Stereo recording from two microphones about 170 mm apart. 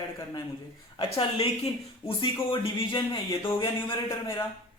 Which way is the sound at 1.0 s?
30° left (ahead or behind).